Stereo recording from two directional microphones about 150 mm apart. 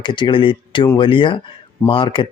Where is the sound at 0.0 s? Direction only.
30° left (ahead or behind).